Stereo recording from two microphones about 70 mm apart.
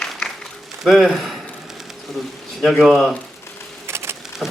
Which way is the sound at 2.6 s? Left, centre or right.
Centre.